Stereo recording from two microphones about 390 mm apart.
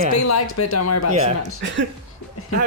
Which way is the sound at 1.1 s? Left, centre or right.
Centre.